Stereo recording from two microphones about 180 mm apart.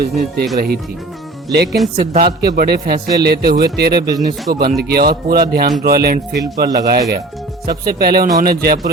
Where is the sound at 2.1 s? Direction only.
60° right (ahead or behind).